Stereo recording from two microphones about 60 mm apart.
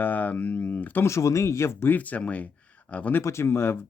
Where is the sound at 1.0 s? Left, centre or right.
Left.